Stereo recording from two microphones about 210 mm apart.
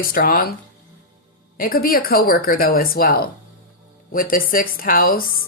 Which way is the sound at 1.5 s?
45° left (ahead or behind).